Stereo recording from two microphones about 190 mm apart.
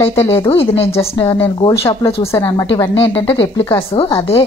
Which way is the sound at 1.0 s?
30° left (ahead or behind).